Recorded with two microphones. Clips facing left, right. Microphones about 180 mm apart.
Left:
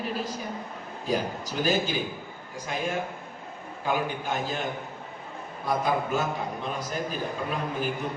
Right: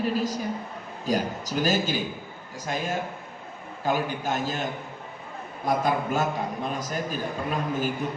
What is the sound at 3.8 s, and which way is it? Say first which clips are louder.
Speech: right 2 dB; 45° right (ahead or behind).